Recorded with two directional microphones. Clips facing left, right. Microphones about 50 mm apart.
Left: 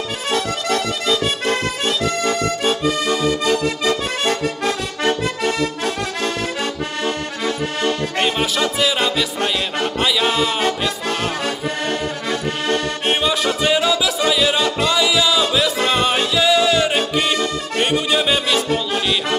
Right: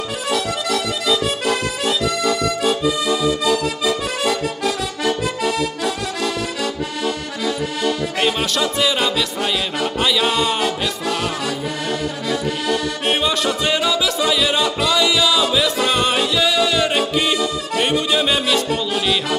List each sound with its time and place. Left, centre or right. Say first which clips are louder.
0.3 s accordion: left 1 dB; left
8.2 s music: even; centre
9.9 s a sound: even; centre
10.6 s music: left 1 dB; left
13.1 s music: left 1 dB; centre